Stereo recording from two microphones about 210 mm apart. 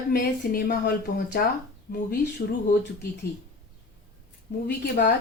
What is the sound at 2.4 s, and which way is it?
Speech, 45° left (ahead or behind).